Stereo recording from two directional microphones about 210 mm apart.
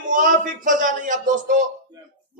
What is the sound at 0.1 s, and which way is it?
A man's voice, 40° right (ahead or behind).